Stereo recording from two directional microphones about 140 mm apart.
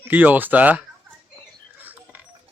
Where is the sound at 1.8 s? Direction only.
10° right (ahead or behind).